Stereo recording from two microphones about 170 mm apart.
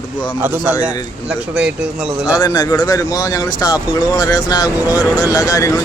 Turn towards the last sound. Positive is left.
turn(degrees=20)  # may be behind; listen again after turning